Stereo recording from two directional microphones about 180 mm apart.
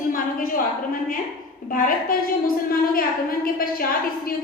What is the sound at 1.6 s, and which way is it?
A woman's voice, 50° left (ahead or behind).